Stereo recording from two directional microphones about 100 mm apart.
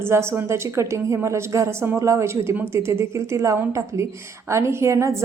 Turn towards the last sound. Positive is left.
turn(degrees=-30)  # may be behind; listen again after turning